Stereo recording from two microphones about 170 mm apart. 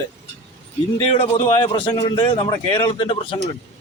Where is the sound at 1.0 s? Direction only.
35° left (ahead or behind).